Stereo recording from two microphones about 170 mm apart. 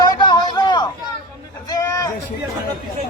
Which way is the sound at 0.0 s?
25° left (ahead or behind).